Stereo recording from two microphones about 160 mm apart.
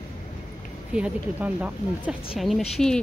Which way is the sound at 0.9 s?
10° right (ahead or behind).